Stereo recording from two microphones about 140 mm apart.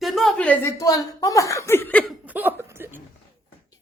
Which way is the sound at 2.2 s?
15° right (ahead or behind).